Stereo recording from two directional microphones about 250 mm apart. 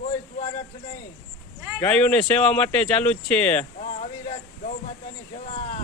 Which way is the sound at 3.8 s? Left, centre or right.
Left.